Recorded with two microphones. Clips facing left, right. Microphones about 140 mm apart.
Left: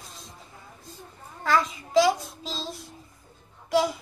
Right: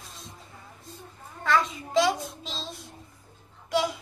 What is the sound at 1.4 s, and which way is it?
A child's voice, centre (ahead or behind).